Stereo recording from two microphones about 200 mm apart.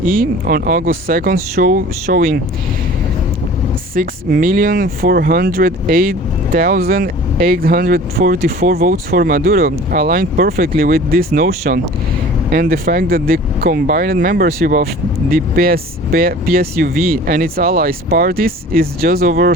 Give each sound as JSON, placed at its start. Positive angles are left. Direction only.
{"t": 0.0, "sound": "speech", "side_deg": -45}
{"t": 3.9, "sound": "speech", "side_deg": -45}